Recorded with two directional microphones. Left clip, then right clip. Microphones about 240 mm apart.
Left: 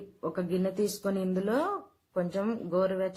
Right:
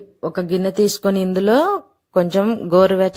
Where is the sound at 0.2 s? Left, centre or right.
Right.